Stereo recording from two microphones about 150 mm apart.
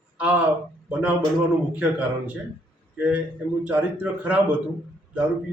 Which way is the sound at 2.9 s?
10° right (ahead or behind).